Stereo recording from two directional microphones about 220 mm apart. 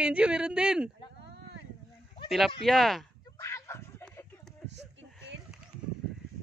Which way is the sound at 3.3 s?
15° left (ahead or behind).